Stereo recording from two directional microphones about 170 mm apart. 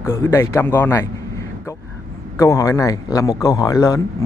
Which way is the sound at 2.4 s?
20° left (ahead or behind).